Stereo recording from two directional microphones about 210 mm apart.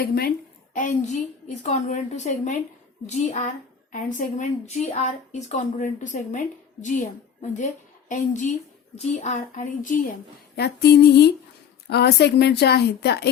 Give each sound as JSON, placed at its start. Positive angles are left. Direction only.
{"t": 0.0, "sound": "a woman's voice", "side_deg": 45}
{"t": 7.5, "sound": "a woman's voice", "side_deg": 35}
{"t": 10.5, "sound": "speech", "side_deg": 50}